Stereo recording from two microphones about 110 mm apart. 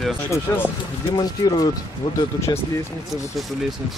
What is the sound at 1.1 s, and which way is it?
Speech, 35° left (ahead or behind).